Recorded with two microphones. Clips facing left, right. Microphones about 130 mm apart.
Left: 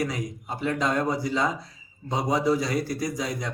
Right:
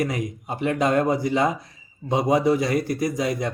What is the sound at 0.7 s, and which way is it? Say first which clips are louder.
Speech: right 6 dB; 20° right (ahead or behind).